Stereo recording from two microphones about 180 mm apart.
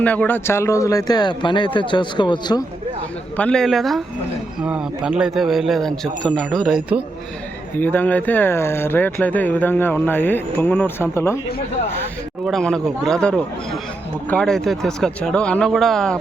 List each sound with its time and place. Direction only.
0.0 s speech: 10° left (ahead or behind); by 2.6 s 25° left (ahead or behind)
3.3 s speech: 5° left (ahead or behind)
7.8 s speech: 10° left (ahead or behind)
12.5 s speech: centre (ahead or behind)